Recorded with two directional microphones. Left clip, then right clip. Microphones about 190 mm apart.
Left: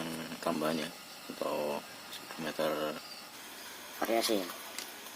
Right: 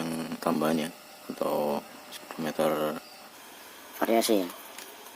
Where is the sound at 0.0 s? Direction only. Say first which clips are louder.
Right 5 dB; 50° right (ahead or behind).